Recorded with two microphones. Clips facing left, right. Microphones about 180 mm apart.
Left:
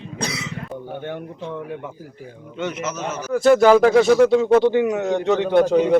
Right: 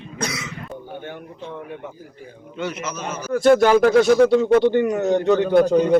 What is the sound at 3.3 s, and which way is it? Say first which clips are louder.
Speech: left 1 dB; centre (ahead or behind).